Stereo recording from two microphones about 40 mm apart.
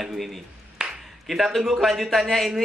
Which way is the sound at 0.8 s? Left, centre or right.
Centre.